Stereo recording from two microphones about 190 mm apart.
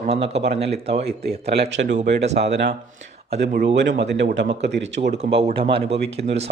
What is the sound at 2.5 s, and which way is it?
Speech, 65° right (ahead or behind).